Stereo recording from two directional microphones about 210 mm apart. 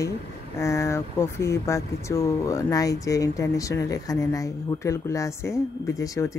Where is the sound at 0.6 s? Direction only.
15° left (ahead or behind).